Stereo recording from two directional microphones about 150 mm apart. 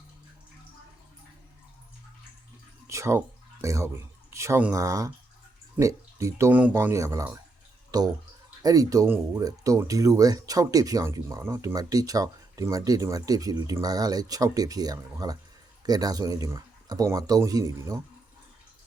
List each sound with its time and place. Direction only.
2.8 s speech: 20° right (ahead or behind)